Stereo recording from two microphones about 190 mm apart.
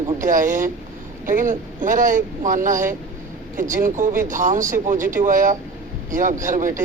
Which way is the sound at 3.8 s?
45° right (ahead or behind).